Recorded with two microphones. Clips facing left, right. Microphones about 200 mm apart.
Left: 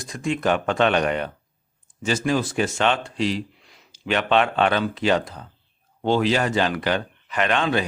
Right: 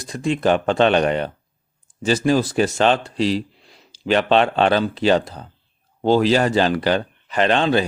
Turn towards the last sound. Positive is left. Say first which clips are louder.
# right 4 dB
turn(degrees=-30)  # may be behind; listen again after turning